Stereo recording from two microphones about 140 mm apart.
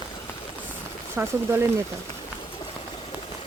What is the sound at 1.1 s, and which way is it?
Speech, 15° right (ahead or behind).